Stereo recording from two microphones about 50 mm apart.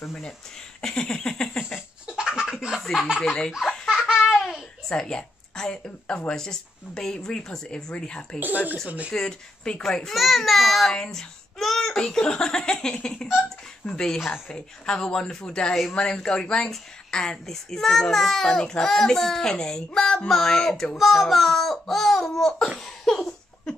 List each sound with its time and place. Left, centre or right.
0.7 s a sound: centre
2.0 s a sound: centre
2.8 s speech: centre
3.2 s a child's voice: centre
4.1 s laughter: centre
4.8 s a child's voice: centre
8.4 s speech: right
9.1 s a child's voice: centre
10.1 s a child's voice: centre
22.8 s laughter: centre